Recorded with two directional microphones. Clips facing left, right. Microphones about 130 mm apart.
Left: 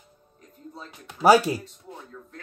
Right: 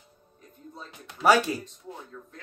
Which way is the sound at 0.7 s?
30° left (ahead or behind).